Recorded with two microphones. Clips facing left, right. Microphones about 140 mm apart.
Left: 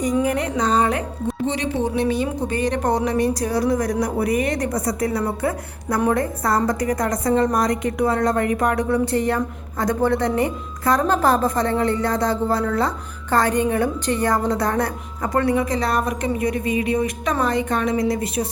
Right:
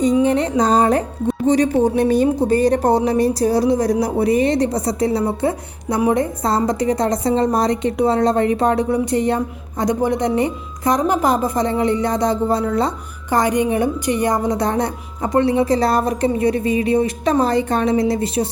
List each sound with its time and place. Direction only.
0.0 s a woman's voice: 25° right (ahead or behind)